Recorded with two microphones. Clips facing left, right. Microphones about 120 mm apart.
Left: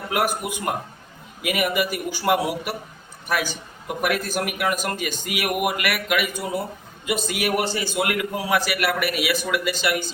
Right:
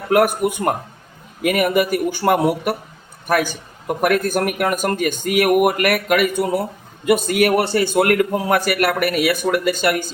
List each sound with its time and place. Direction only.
0.1 s a man's voice: 50° right (ahead or behind)